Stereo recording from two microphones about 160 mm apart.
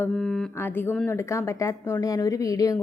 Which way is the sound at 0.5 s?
15° left (ahead or behind).